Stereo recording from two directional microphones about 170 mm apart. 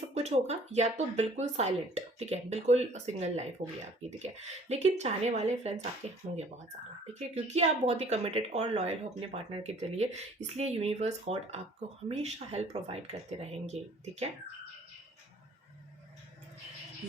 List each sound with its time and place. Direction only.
0.1 s speech: 40° right (ahead or behind)